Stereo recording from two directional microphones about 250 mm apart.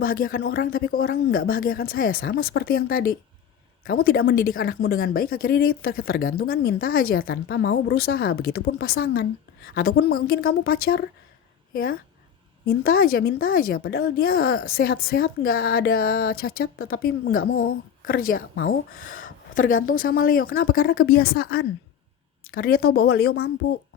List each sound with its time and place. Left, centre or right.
0.0 s a woman's voice: left